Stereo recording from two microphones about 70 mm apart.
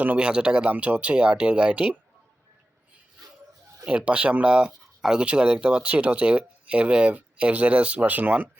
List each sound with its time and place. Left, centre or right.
0.0 s speech: right
0.3 s speech: centre
3.8 s speech: centre